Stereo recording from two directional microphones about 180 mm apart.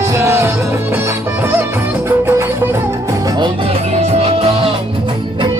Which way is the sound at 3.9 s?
35° right (ahead or behind).